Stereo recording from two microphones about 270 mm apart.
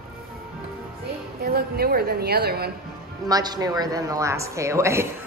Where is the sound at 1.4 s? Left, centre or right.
Right.